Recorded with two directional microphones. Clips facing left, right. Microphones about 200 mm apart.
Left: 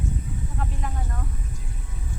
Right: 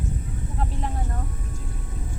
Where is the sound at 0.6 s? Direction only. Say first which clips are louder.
Right 5 dB; 30° right (ahead or behind).